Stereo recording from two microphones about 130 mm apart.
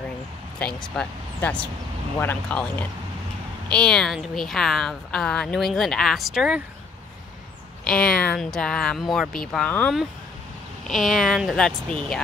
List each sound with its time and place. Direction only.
0.6 s speech: 5° left (ahead or behind)
7.8 s speech: 5° left (ahead or behind)